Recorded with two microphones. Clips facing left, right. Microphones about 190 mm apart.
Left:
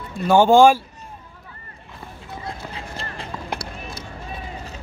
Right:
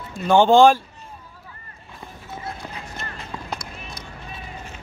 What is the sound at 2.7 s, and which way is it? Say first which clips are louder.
Run: left 2 dB; 30° left (ahead or behind).